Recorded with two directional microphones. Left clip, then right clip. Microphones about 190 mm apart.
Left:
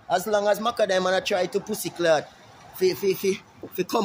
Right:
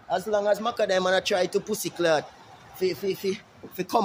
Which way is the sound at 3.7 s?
Centre (ahead or behind).